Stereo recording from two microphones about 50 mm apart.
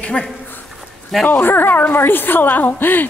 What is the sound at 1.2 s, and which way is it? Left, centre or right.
A woman's voice, left.